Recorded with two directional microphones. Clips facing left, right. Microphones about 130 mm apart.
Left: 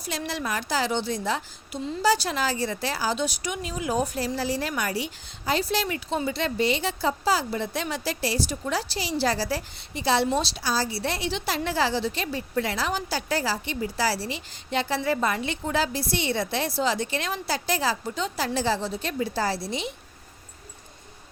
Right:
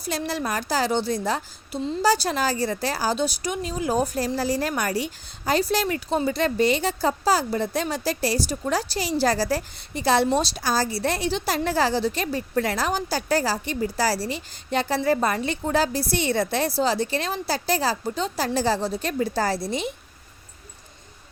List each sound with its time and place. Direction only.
0.0 s a woman's voice: 40° right (ahead or behind)